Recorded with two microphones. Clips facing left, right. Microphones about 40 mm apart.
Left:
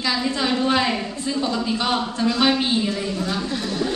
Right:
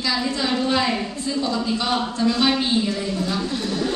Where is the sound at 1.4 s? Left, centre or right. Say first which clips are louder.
Even; centre.